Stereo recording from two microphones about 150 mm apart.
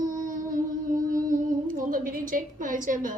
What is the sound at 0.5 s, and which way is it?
A woman's voice, 65° right (ahead or behind).